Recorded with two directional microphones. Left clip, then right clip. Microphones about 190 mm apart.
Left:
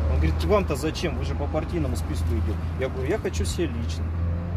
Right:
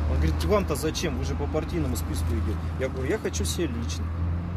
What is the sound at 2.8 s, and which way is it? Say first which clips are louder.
Speech: left 1 dB; 10° left (ahead or behind).